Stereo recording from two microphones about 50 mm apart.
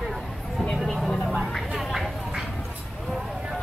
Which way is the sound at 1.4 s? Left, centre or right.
Centre.